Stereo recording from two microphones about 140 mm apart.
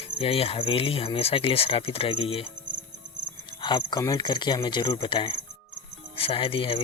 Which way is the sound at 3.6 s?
30° left (ahead or behind).